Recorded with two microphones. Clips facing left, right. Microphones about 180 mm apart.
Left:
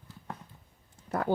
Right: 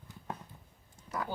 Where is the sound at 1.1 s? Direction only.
55° left (ahead or behind).